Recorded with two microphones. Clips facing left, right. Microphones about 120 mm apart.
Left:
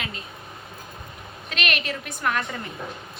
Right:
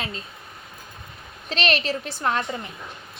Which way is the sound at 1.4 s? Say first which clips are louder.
Right 4 dB; 30° right (ahead or behind).